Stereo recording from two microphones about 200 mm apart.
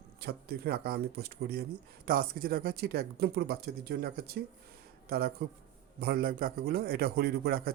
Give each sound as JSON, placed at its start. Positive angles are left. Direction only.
{"t": 0.2, "sound": "speech", "side_deg": -50}